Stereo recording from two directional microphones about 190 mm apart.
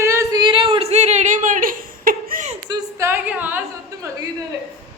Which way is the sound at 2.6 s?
10° right (ahead or behind).